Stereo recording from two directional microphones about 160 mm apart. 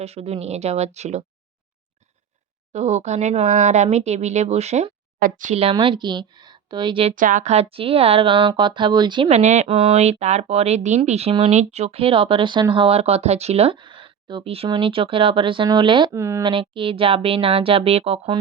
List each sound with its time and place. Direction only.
0.0 s speech: 40° right (ahead or behind)
2.7 s speech: 45° right (ahead or behind)
5.7 s a woman's voice: 30° right (ahead or behind)
7.2 s speech: 55° right (ahead or behind); by 9.3 s 30° right (ahead or behind)
9.3 s speech: 50° right (ahead or behind); by 16.1 s 30° right (ahead or behind)
16.1 s speech: 15° right (ahead or behind)
16.4 s speech: 30° right (ahead or behind)